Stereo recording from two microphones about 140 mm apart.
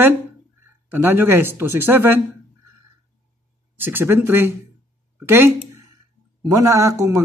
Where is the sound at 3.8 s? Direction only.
15° right (ahead or behind).